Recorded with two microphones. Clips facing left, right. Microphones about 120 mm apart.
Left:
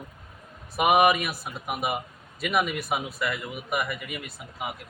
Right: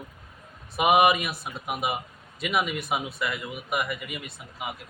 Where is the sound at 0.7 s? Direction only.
20° right (ahead or behind).